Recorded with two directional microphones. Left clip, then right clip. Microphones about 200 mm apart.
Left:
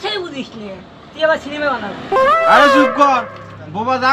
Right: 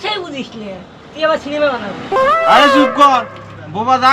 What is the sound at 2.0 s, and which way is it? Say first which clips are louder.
Speech: even; centre (ahead or behind).